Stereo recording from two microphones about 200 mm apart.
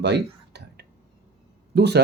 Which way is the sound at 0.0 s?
55° right (ahead or behind).